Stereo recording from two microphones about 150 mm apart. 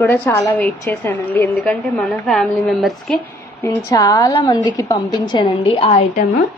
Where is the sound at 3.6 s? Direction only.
20° left (ahead or behind).